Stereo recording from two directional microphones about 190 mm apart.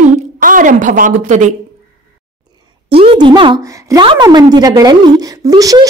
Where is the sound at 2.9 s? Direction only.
25° right (ahead or behind).